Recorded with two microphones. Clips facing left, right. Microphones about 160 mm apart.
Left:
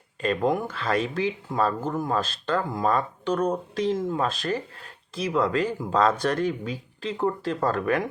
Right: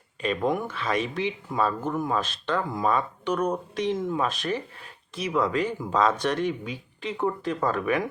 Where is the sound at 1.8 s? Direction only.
35° left (ahead or behind).